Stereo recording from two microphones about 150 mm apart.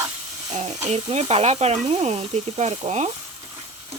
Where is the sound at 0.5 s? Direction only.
45° right (ahead or behind).